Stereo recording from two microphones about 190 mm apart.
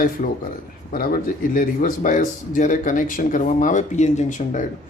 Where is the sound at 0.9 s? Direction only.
50° left (ahead or behind).